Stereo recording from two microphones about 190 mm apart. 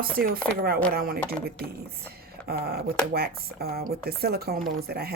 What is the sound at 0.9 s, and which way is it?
Speech, 50° right (ahead or behind).